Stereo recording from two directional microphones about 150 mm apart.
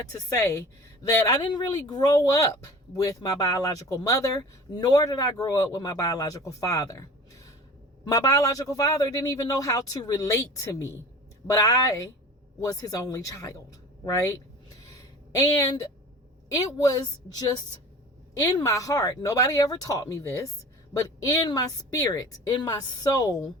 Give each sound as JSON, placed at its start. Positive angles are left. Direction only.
{"t": 0.0, "sound": "speech", "side_deg": 20}
{"t": 14.8, "sound": "a sound", "side_deg": 25}
{"t": 16.5, "sound": "speech", "side_deg": 25}